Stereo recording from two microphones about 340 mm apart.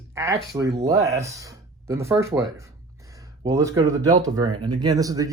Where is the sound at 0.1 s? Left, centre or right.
Centre.